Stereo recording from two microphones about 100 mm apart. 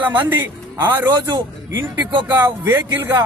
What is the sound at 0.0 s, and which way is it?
A man's voice, 20° right (ahead or behind).